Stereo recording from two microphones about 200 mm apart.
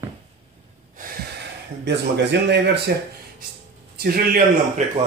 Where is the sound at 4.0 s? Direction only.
45° right (ahead or behind).